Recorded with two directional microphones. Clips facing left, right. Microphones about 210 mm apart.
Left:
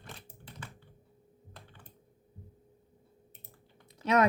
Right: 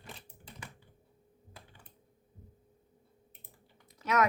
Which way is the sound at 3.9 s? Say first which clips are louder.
Left 4 dB; 30° left (ahead or behind).